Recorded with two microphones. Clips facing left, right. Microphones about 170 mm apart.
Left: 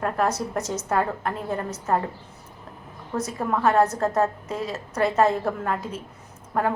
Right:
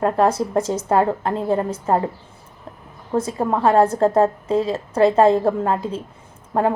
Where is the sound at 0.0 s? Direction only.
30° right (ahead or behind).